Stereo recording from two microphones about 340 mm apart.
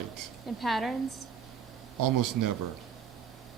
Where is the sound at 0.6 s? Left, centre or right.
Centre.